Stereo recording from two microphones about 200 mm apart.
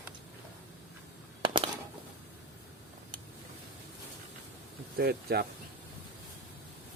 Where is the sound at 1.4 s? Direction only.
25° right (ahead or behind).